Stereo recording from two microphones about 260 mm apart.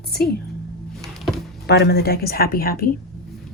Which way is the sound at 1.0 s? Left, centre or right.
Centre.